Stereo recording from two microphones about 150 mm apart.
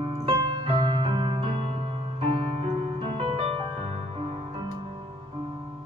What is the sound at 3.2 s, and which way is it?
Music, 35° right (ahead or behind).